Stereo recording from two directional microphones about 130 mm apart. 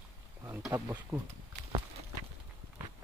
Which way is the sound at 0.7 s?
15° right (ahead or behind).